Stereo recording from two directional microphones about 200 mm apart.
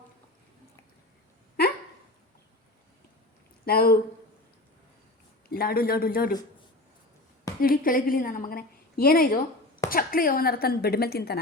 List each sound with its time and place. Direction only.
3.7 s a woman's voice: 50° left (ahead or behind)
5.5 s a woman's voice: 50° left (ahead or behind)
7.6 s a woman's voice: 45° left (ahead or behind)